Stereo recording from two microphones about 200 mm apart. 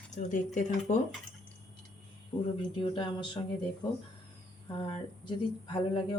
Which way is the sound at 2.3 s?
25° left (ahead or behind).